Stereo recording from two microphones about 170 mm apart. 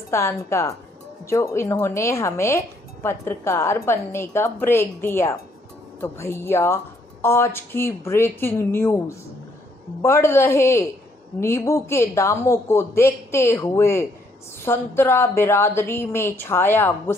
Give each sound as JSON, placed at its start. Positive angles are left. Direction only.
{"t": 0.1, "sound": "speech", "side_deg": 15}
{"t": 10.0, "sound": "speech", "side_deg": 15}